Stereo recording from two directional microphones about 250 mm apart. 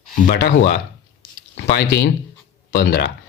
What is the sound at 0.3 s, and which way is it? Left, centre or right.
Speech, left.